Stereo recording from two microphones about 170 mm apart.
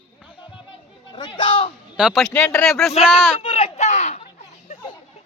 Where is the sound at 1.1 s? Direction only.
30° left (ahead or behind).